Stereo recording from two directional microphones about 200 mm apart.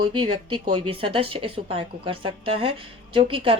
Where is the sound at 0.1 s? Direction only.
25° right (ahead or behind).